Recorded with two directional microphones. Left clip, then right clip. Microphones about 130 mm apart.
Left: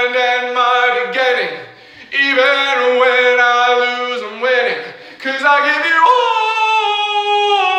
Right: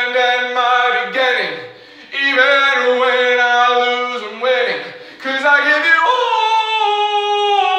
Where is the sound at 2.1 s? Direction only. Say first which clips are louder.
Even; 25° left (ahead or behind).